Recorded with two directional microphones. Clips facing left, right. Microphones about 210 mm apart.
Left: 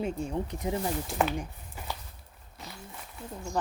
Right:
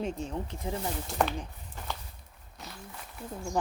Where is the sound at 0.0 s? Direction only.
10° left (ahead or behind).